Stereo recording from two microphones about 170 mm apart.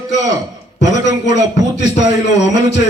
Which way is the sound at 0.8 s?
45° left (ahead or behind).